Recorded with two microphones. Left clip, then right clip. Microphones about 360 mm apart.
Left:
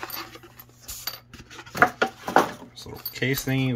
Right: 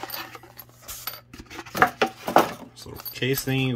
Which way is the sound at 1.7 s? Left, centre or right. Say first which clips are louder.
Even; right.